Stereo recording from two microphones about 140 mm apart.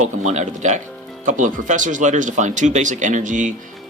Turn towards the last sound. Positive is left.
turn(degrees=-65)  # may be behind; listen again after turning